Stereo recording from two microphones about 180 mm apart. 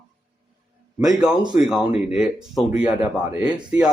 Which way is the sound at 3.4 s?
5° right (ahead or behind).